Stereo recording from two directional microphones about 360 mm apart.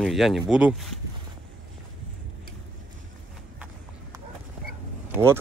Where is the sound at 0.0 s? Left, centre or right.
Centre.